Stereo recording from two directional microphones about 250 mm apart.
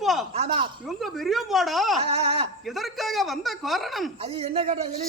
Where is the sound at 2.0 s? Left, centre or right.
Right.